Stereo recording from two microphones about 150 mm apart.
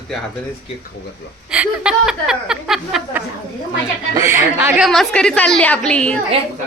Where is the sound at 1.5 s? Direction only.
5° right (ahead or behind).